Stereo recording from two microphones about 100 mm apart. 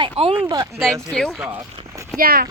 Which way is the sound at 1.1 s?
5° left (ahead or behind).